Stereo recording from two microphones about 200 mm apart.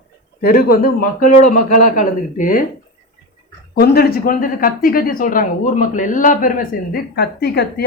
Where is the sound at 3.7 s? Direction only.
50° left (ahead or behind).